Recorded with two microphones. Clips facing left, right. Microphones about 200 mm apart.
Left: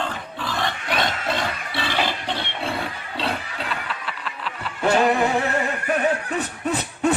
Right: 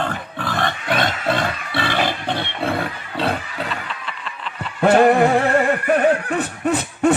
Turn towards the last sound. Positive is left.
turn(degrees=-50)  # may be behind; listen again after turning